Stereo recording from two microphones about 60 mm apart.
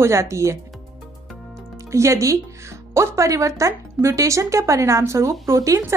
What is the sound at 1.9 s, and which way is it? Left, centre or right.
Speech, right.